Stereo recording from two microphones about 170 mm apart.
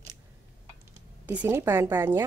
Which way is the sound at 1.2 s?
10° right (ahead or behind).